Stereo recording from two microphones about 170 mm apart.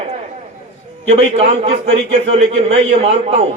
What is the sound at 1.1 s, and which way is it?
A man's voice, 40° right (ahead or behind).